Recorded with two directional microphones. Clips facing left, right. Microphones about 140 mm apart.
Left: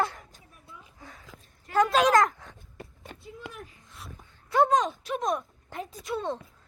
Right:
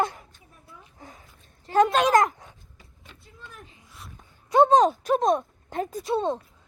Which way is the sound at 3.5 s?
90° left.